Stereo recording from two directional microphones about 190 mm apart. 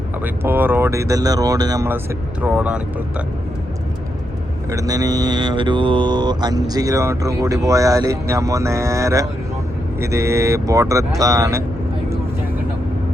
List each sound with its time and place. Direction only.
0.4 s speech: 10° right (ahead or behind)
4.7 s speech: 20° right (ahead or behind)